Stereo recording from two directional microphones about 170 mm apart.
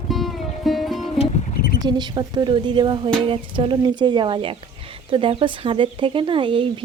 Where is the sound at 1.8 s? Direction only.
25° right (ahead or behind).